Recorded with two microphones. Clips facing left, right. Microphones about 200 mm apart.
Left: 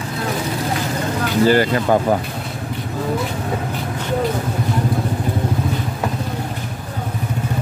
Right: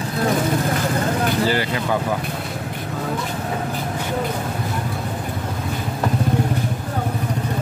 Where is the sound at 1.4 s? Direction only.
45° left (ahead or behind).